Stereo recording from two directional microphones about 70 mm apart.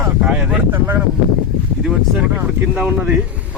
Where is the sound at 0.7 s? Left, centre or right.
Right.